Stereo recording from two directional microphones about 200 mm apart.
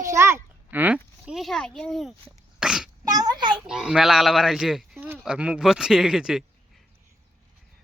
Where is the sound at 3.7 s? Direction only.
5° right (ahead or behind).